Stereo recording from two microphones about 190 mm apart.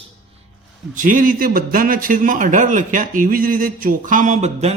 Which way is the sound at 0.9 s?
45° right (ahead or behind).